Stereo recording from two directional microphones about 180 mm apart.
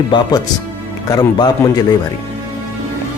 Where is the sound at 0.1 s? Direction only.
25° left (ahead or behind).